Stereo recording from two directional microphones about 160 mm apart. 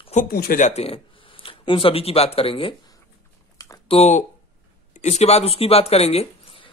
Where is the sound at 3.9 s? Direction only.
40° left (ahead or behind).